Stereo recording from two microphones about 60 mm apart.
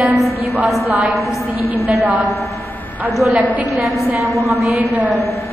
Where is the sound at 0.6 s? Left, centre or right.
Centre.